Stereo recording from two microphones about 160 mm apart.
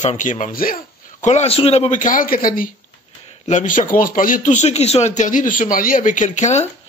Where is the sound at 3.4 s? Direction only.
50° left (ahead or behind).